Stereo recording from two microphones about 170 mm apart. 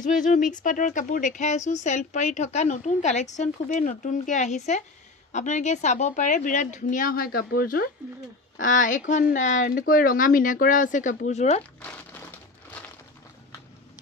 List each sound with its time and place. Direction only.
0.0 s a woman's voice: 50° left (ahead or behind)
8.5 s a woman's voice: 50° left (ahead or behind)
11.8 s crumpling: 10° left (ahead or behind)